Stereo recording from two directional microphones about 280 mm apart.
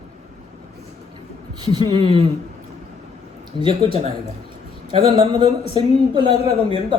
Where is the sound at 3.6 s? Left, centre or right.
Centre.